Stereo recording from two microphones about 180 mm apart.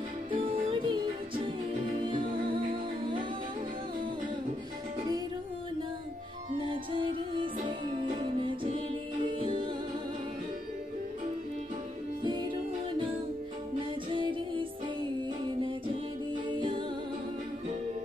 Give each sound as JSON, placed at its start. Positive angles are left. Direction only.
{"t": 0.3, "sound": "music", "side_deg": -30}
{"t": 6.6, "sound": "music", "side_deg": -30}
{"t": 12.2, "sound": "music", "side_deg": -25}
{"t": 14.1, "sound": "music", "side_deg": -25}
{"t": 16.5, "sound": "music", "side_deg": -25}